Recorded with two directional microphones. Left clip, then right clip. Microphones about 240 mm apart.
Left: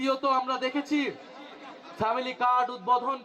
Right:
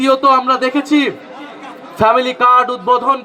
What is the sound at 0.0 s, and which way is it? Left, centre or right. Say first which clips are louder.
A man's voice: right 15 dB; right.